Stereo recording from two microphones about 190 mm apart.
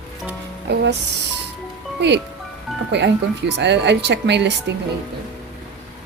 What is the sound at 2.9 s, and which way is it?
Speech, 65° right (ahead or behind).